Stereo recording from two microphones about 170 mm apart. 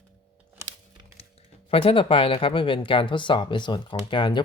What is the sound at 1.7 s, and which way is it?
Speech, 35° left (ahead or behind).